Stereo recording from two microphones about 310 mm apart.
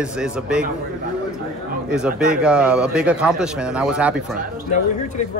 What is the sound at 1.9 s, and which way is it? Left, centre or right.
Speech, centre.